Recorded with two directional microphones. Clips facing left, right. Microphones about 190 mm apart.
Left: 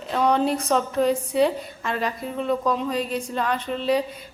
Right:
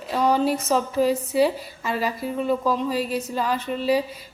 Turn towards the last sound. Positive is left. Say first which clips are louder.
# right 1 dB
turn(degrees=-5)  # may be behind; listen again after turning